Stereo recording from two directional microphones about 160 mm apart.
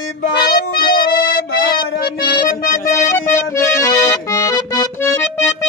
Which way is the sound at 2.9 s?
15° left (ahead or behind).